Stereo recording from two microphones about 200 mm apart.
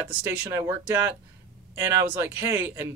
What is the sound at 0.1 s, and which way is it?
Speech, 10° right (ahead or behind).